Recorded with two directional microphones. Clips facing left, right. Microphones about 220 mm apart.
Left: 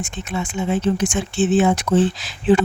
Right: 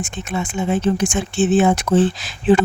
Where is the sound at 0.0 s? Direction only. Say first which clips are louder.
Right 1 dB; 50° right (ahead or behind).